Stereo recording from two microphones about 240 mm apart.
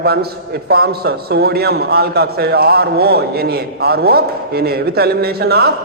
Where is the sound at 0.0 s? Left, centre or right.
Right.